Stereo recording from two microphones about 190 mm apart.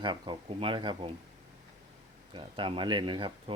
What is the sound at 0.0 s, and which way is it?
Speech, 25° right (ahead or behind).